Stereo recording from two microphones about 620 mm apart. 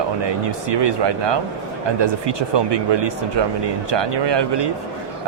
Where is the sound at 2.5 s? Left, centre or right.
Right.